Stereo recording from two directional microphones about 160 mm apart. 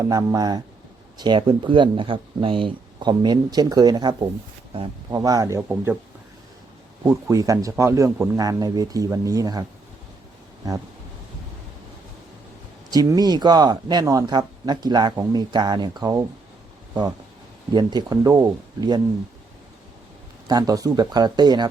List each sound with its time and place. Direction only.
0.0 s speech: 25° right (ahead or behind)
5.2 s speech: 20° right (ahead or behind)
7.0 s speech: 20° right (ahead or behind)
12.9 s speech: 25° right (ahead or behind)
17.7 s speech: 25° right (ahead or behind)
20.5 s speech: 25° right (ahead or behind)